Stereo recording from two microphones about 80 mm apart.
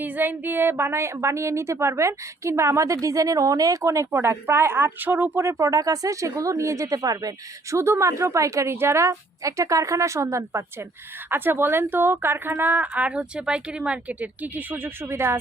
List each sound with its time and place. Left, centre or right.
0.0 s a woman's voice: right